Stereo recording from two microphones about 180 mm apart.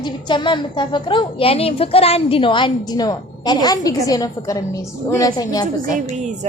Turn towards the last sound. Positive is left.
turn(degrees=-40)  # may be behind; listen again after turning